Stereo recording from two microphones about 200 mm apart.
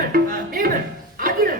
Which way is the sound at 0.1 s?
45° right (ahead or behind).